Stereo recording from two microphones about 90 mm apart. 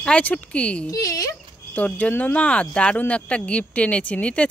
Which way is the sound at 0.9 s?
40° left (ahead or behind).